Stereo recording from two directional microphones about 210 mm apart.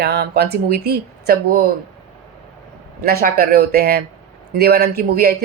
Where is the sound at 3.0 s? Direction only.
45° right (ahead or behind).